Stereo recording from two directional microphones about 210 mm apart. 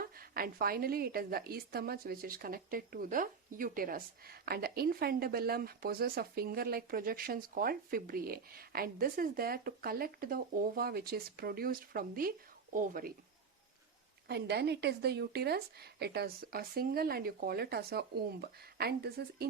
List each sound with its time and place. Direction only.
0.0 s a woman's voice: 45° right (ahead or behind)
14.3 s a woman's voice: 50° right (ahead or behind)